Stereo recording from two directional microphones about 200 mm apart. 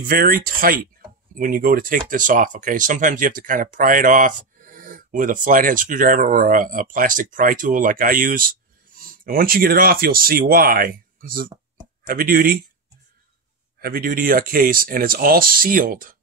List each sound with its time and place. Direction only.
0.0 s speech: 45° right (ahead or behind)
13.7 s speech: 50° right (ahead or behind)